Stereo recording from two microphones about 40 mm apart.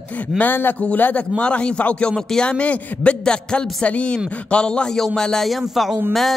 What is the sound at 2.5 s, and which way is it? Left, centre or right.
A man's voice, left.